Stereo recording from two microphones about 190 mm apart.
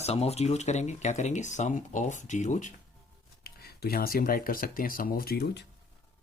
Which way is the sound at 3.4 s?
55° left (ahead or behind).